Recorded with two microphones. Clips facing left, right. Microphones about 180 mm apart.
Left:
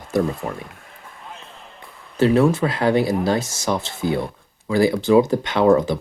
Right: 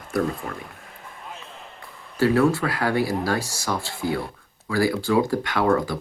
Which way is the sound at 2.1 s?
20° left (ahead or behind).